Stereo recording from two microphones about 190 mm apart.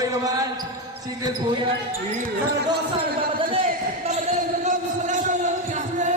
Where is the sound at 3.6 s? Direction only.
40° right (ahead or behind).